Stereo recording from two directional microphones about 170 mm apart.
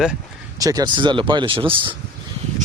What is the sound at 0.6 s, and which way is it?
Speech, 20° right (ahead or behind).